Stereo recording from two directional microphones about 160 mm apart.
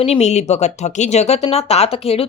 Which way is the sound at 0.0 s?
40° left (ahead or behind).